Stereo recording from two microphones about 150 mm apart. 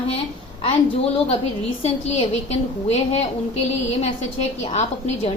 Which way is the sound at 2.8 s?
45° left (ahead or behind).